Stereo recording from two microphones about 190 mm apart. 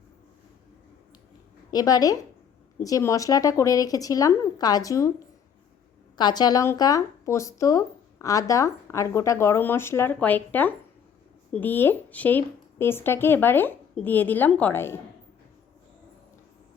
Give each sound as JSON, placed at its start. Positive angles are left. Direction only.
{"t": 1.7, "sound": "a woman's voice", "side_deg": 20}
{"t": 6.1, "sound": "speech", "side_deg": 20}